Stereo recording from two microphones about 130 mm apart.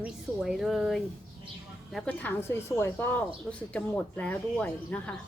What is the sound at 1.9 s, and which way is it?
Speech, 10° left (ahead or behind).